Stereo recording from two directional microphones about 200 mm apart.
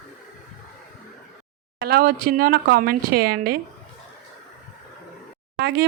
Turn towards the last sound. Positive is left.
turn(degrees=-55)  # may be behind; listen again after turning